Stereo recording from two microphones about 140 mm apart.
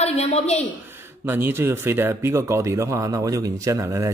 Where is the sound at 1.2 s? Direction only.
15° right (ahead or behind).